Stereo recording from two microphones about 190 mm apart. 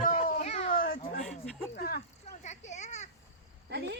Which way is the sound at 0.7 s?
50° left (ahead or behind).